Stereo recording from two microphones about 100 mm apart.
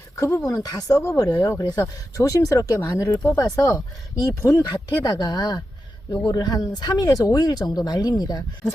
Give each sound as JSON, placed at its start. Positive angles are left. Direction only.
{"t": 0.2, "sound": "speech", "side_deg": 30}